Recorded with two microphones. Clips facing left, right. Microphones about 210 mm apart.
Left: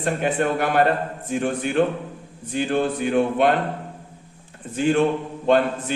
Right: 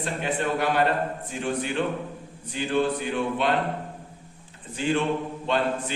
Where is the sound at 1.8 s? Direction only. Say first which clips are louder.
Left 6 dB; 50° left (ahead or behind).